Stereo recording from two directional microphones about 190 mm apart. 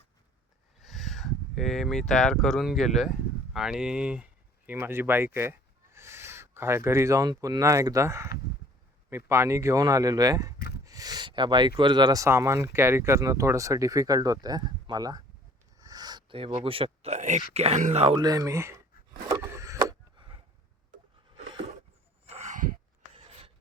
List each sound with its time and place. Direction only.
0.8 s speech: centre (ahead or behind); by 10.5 s 20° right (ahead or behind)
10.8 s a sound: 20° right (ahead or behind)
11.8 s speech: 25° right (ahead or behind)
18.2 s speech: 20° right (ahead or behind)
19.3 s wood: 15° right (ahead or behind)
21.3 s a sound: 30° right (ahead or behind); by 22.8 s 45° right (ahead or behind)